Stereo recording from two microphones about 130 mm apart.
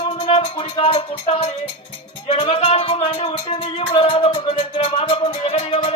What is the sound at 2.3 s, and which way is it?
Speech, 55° left (ahead or behind).